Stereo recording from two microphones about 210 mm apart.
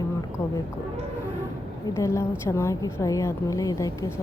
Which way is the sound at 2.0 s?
15° left (ahead or behind).